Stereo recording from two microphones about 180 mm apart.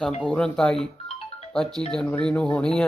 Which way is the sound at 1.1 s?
35° left (ahead or behind).